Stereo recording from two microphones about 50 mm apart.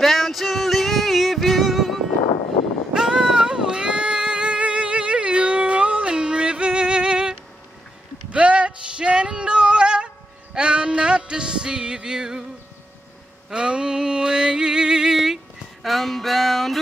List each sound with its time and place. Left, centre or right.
0.0 s music: centre
2.9 s child singing: centre
8.3 s male singing: right
13.5 s a sound: centre
15.8 s music: centre